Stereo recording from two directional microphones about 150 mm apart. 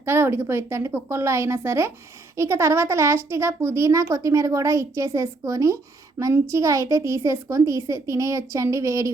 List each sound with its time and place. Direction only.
0.0 s a woman's voice: 15° right (ahead or behind)